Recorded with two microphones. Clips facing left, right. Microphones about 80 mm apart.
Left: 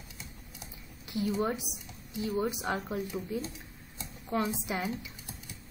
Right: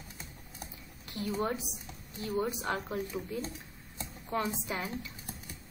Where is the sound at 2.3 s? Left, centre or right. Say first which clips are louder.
Even; centre.